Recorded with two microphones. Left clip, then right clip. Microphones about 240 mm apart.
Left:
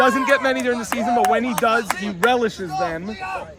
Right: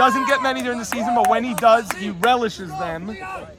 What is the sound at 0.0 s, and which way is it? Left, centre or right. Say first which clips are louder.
A man's voice: even; centre.